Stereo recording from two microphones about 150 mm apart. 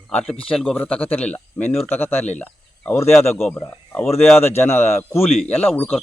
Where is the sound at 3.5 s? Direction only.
10° left (ahead or behind).